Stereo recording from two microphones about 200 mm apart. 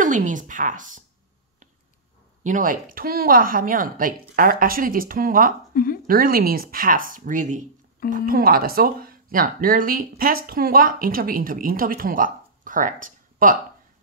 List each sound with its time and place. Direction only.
0.0 s a woman's voice: 40° right (ahead or behind)
2.4 s speech: 40° right (ahead or behind)